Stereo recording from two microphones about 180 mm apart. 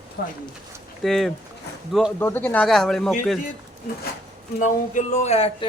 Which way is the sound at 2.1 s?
10° left (ahead or behind).